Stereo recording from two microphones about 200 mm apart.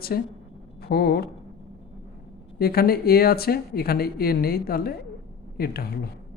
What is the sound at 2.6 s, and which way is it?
Speech, 50° left (ahead or behind).